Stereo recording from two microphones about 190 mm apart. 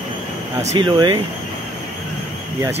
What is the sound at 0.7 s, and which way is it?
Speech, 25° right (ahead or behind).